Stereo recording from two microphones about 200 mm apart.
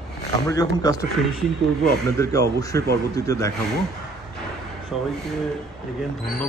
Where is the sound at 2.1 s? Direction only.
15° left (ahead or behind).